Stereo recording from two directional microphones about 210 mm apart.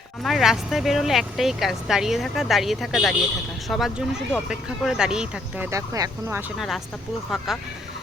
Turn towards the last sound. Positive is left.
turn(degrees=0)  # may be behind; listen again after turning